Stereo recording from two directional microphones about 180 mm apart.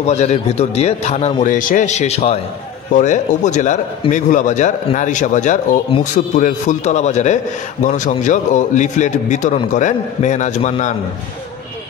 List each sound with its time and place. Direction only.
0.0 s a man's voice: 40° left (ahead or behind)